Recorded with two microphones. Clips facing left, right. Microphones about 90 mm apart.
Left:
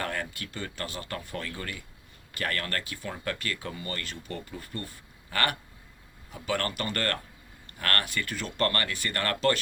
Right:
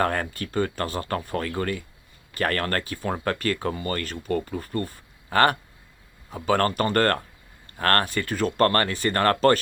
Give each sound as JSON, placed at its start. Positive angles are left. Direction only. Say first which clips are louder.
{"t": 0.0, "sound": "speech", "louder": "right 9 dB", "side_deg": -45}